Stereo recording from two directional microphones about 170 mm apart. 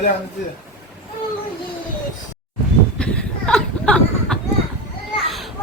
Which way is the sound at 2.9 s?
5° left (ahead or behind).